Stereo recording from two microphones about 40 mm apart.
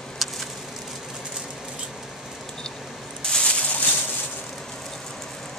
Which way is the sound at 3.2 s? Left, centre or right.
Centre.